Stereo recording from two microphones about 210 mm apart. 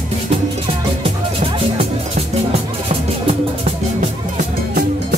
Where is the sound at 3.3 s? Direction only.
30° right (ahead or behind).